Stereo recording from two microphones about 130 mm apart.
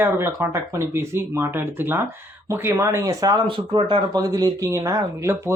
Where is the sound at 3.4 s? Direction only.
40° right (ahead or behind); by 5.4 s 20° right (ahead or behind).